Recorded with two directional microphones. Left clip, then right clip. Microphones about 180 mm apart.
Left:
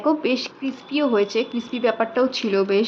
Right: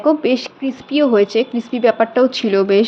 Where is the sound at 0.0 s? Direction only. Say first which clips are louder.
Right 6 dB; 15° right (ahead or behind).